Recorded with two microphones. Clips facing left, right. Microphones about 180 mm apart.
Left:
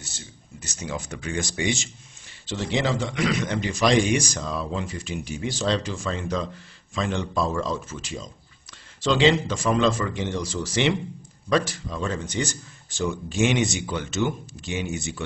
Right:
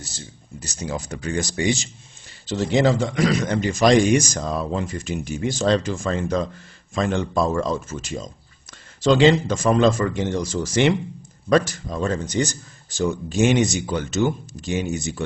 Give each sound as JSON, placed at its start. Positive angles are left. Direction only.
{"t": 0.0, "sound": "speech", "side_deg": -35}